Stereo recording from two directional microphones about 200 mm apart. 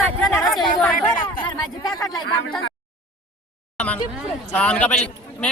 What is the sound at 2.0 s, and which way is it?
Speech, 20° left (ahead or behind).